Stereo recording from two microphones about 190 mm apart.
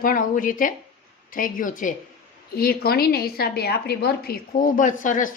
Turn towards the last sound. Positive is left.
turn(degrees=45)  # may be behind; listen again after turning